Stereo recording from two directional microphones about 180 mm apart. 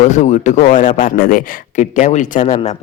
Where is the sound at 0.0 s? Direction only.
40° left (ahead or behind).